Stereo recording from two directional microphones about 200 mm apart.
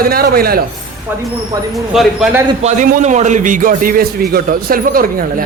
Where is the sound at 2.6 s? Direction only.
40° right (ahead or behind).